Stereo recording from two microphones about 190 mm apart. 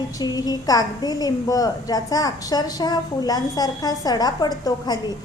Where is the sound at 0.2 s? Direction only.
20° left (ahead or behind).